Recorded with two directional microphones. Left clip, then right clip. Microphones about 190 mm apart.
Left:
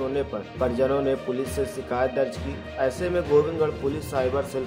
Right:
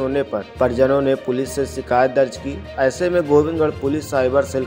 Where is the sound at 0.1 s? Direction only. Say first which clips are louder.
Right 7 dB; 35° right (ahead or behind).